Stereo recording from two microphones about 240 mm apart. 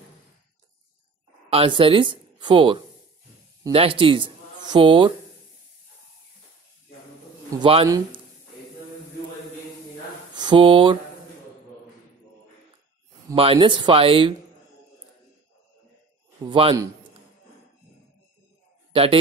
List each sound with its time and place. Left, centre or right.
1.5 s speech: right
7.5 s speech: right
10.3 s speech: centre
13.3 s speech: right
16.4 s speech: right
18.9 s speech: right